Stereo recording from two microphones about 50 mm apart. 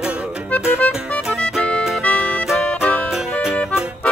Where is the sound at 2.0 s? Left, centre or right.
Left.